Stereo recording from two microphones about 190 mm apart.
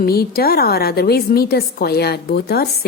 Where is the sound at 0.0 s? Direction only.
50° left (ahead or behind).